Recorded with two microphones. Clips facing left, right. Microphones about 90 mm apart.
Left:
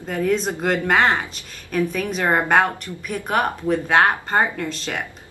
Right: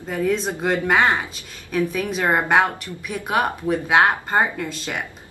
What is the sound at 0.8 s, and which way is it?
A woman's voice, 5° right (ahead or behind).